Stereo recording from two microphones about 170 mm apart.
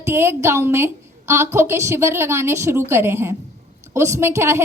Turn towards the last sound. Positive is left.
turn(degrees=-15)  # may be behind; listen again after turning